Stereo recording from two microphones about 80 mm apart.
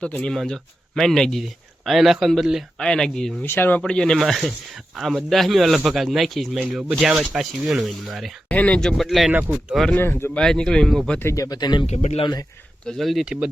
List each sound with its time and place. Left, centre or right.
0.0 s speech: centre
2.7 s speech: centre
3.4 s speech: left
3.8 s speech: centre
4.2 s speech: centre
8.4 s speech: centre
9.3 s speech: right
9.9 s speech: left
10.3 s speech: centre
11.2 s speech: left
11.4 s speech: left
12.8 s speech: centre